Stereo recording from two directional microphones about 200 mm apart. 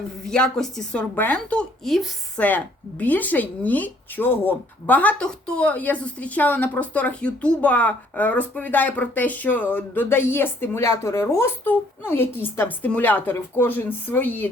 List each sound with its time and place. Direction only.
0.3 s speech: 5° left (ahead or behind)